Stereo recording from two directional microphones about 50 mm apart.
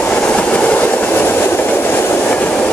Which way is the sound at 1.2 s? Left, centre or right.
Left.